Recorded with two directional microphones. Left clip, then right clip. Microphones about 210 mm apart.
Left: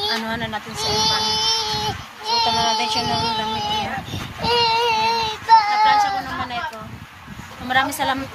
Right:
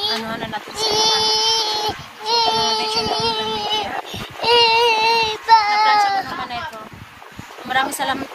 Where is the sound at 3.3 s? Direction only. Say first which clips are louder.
Right 1 dB; 40° right (ahead or behind).